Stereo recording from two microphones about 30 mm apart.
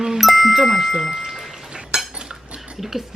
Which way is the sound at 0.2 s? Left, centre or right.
Centre.